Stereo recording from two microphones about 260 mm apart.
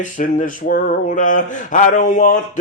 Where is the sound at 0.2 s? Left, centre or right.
Left.